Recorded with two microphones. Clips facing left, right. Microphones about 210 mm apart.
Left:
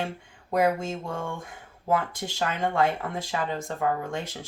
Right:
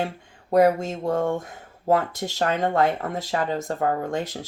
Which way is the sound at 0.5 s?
40° right (ahead or behind).